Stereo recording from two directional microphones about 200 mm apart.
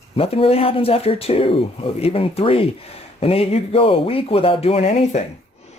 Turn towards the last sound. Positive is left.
turn(degrees=30)  # may be behind; listen again after turning